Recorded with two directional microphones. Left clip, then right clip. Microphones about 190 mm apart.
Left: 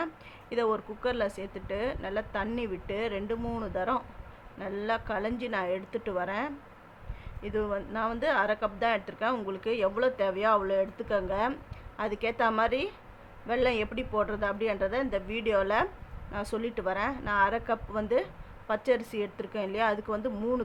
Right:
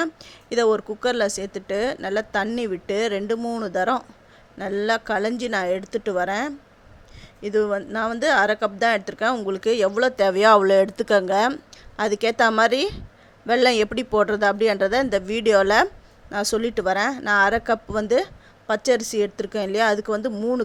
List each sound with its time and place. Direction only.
0.5 s speech: 40° right (ahead or behind)